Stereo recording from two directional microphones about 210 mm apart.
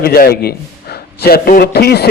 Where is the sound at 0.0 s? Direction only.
45° left (ahead or behind).